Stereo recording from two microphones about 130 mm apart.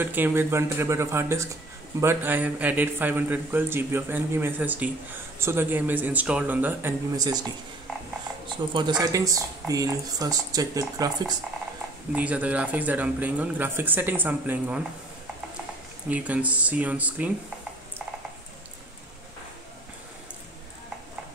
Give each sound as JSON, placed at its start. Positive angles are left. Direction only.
{"t": 0.0, "sound": "speech", "side_deg": -15}
{"t": 7.2, "sound": "speech", "side_deg": -30}
{"t": 9.0, "sound": "speech", "side_deg": -25}
{"t": 12.1, "sound": "speech", "side_deg": -10}
{"t": 16.1, "sound": "speech", "side_deg": -10}